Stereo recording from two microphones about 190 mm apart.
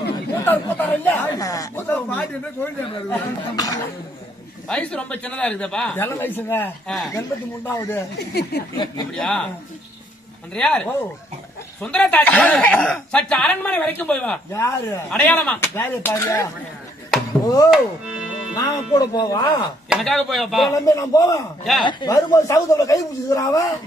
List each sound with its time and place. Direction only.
0.5 s speech: 10° left (ahead or behind)
4.6 s speech: 5° left (ahead or behind)
7.1 s speech: 15° left (ahead or behind)
8.2 s speech: 60° left (ahead or behind)
9.1 s speech: 5° left (ahead or behind)
10.5 s speech: 5° left (ahead or behind)
17.6 s music: 5° right (ahead or behind)
18.6 s speech: 20° left (ahead or behind)
19.9 s speech: centre (ahead or behind)
20.8 s speech: 15° left (ahead or behind)